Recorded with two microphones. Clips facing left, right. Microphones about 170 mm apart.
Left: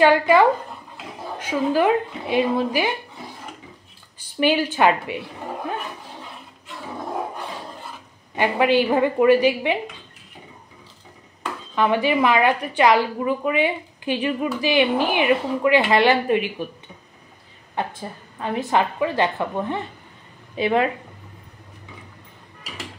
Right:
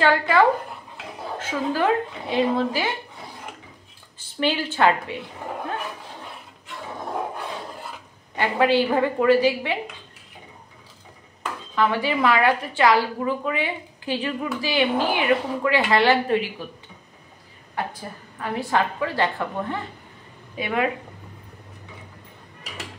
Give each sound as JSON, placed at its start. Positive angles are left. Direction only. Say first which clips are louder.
{"t": 1.4, "sound": "a woman's voice", "louder": "left 4 dB", "side_deg": 15}
{"t": 4.2, "sound": "a woman's voice", "louder": "left 4 dB", "side_deg": 15}
{"t": 8.4, "sound": "a woman's voice", "louder": "left 1 dB", "side_deg": 15}
{"t": 11.7, "sound": "a woman's voice", "louder": "left 3 dB", "side_deg": 15}
{"t": 17.7, "sound": "a woman's voice", "louder": "left 2 dB", "side_deg": 25}